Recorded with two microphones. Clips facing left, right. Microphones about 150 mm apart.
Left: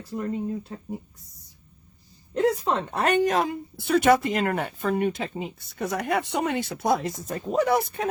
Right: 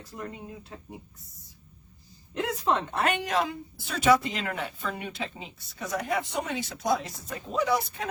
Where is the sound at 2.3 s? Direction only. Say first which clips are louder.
Left 4 dB; 40° left (ahead or behind).